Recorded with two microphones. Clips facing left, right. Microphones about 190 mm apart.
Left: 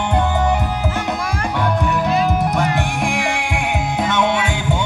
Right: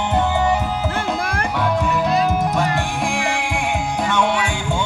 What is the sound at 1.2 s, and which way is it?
Music, 55° right (ahead or behind).